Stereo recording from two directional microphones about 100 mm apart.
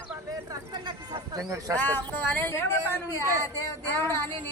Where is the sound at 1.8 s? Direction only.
20° left (ahead or behind).